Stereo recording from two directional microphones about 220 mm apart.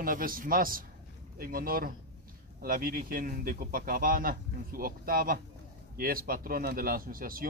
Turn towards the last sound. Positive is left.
turn(degrees=-40)  # may be behind; listen again after turning